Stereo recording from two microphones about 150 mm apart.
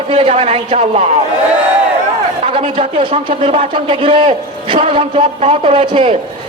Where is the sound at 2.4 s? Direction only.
40° right (ahead or behind).